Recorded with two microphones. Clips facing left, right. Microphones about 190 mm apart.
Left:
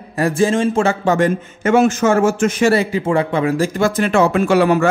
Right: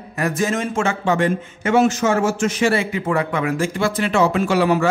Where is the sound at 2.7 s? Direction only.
35° left (ahead or behind); by 4.8 s 55° left (ahead or behind).